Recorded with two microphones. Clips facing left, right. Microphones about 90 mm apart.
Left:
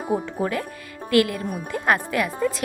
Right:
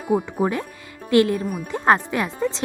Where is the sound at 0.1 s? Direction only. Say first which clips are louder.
Right 4 dB; 20° right (ahead or behind).